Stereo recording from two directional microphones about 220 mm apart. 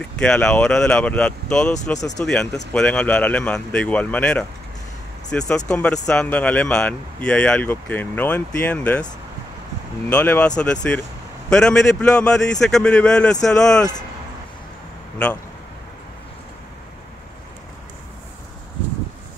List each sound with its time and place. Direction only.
0.2 s speech: 5° left (ahead or behind)
10.0 s speech: 5° left (ahead or behind)